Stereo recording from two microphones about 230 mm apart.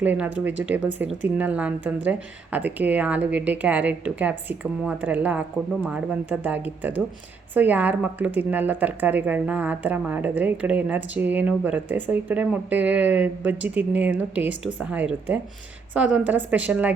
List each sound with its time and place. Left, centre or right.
0.0 s speech: centre